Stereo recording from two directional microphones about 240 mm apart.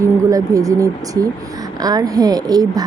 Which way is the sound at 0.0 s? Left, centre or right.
Centre.